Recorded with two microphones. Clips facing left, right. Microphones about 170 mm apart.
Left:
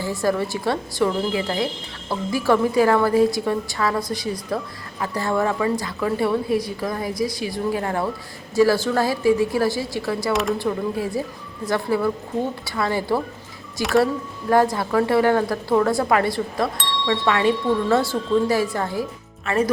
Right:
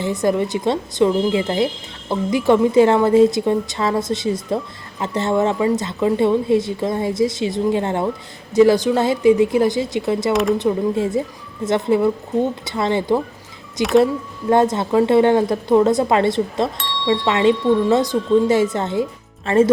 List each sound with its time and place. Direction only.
0.0 s speech: 20° right (ahead or behind)